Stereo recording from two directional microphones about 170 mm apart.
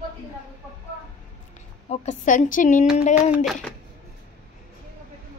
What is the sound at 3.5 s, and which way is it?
Speech, 5° left (ahead or behind).